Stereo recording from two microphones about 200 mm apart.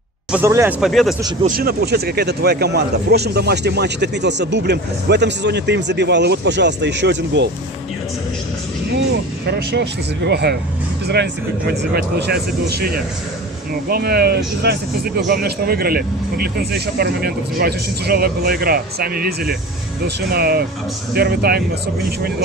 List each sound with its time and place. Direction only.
0.3 s speech: 15° right (ahead or behind)
0.7 s speech: centre (ahead or behind)
1.4 s speech: 45° right (ahead or behind); by 7.4 s 60° right (ahead or behind)
9.5 s speech: 60° right (ahead or behind)